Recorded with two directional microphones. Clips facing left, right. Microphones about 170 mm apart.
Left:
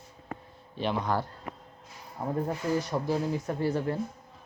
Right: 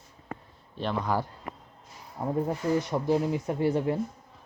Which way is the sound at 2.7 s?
20° right (ahead or behind).